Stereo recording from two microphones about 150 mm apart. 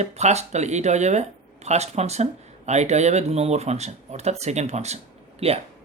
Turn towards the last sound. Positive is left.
turn(degrees=-45)  # may be behind; listen again after turning